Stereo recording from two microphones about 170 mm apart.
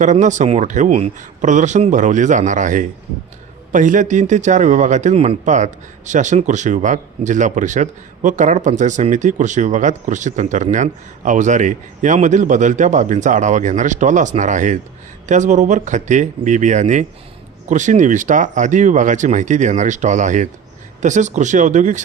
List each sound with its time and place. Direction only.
0.0 s a man's voice: 45° right (ahead or behind)